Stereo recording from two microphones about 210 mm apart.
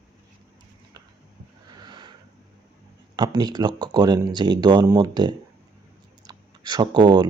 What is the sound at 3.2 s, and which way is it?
Speech, 20° right (ahead or behind).